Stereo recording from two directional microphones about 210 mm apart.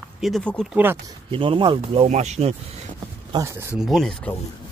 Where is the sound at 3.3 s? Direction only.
15° right (ahead or behind).